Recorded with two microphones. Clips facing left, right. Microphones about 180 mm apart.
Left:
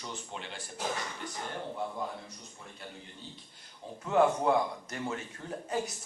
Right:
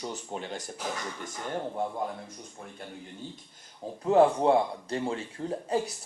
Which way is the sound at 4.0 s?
35° right (ahead or behind).